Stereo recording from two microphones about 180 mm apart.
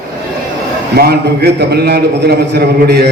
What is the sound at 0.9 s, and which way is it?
A man's voice, 65° right (ahead or behind).